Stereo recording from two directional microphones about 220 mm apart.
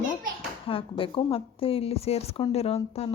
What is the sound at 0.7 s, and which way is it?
Speech, 25° left (ahead or behind).